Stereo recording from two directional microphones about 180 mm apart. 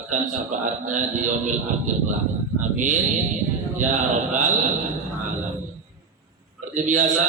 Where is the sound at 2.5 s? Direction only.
45° right (ahead or behind).